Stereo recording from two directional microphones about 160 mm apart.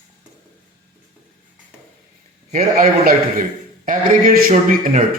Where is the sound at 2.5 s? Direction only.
65° right (ahead or behind).